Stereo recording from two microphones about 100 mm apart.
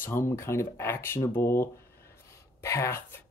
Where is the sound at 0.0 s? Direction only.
25° left (ahead or behind).